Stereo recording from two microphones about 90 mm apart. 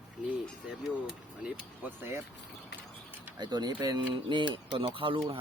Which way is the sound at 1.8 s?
25° right (ahead or behind).